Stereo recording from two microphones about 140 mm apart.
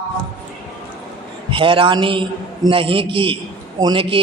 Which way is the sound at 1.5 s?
40° right (ahead or behind).